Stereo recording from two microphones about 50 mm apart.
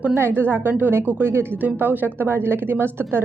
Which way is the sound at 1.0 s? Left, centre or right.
Right.